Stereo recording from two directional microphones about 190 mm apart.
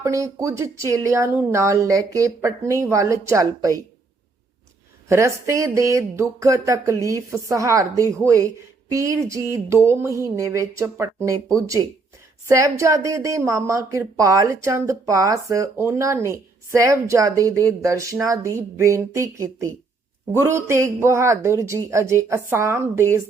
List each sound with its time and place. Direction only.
0.0 s a woman's voice: 15° right (ahead or behind)
5.0 s a woman's voice: 15° right (ahead or behind)